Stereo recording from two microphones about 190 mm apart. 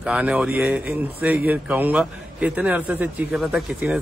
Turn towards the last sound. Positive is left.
turn(degrees=-5)  # may be behind; listen again after turning